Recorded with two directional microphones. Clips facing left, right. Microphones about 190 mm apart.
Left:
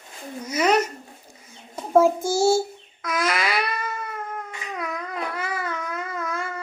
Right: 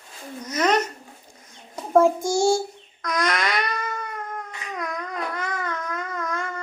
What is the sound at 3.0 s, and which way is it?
Babbling, 5° left (ahead or behind).